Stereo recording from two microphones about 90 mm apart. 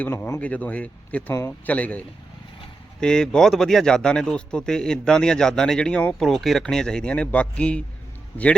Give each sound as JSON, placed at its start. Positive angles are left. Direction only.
{"t": 0.0, "sound": "speech", "side_deg": 25}
{"t": 1.3, "sound": "speech", "side_deg": 30}
{"t": 1.6, "sound": "speech", "side_deg": 15}
{"t": 6.2, "sound": "speech", "side_deg": 0}